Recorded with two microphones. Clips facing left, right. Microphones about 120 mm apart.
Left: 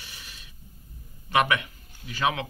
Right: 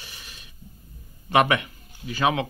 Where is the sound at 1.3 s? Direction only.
20° right (ahead or behind).